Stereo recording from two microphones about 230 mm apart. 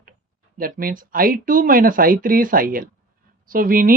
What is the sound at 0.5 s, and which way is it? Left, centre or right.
Speech, right.